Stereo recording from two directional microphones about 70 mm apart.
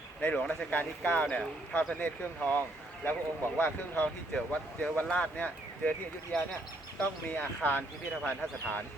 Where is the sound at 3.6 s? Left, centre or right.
Left.